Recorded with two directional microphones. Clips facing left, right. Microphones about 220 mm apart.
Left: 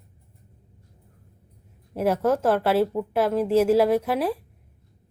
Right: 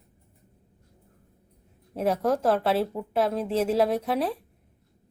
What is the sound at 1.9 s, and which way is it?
A woman's voice, 5° left (ahead or behind).